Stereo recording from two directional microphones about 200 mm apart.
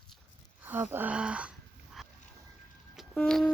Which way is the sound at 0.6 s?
10° right (ahead or behind).